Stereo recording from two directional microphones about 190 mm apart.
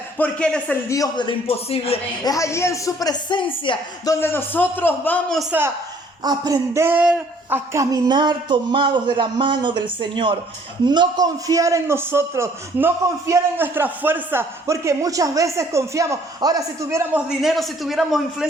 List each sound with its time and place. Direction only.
0.2 s a woman's voice: 5° left (ahead or behind)
0.9 s a man's voice: 20° left (ahead or behind)
2.2 s a woman's voice: 15° left (ahead or behind); by 5.5 s centre (ahead or behind)
6.2 s a man's voice: 20° right (ahead or behind)
17.4 s a man's voice: centre (ahead or behind)